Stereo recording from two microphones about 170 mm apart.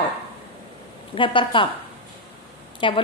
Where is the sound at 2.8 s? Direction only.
30° left (ahead or behind).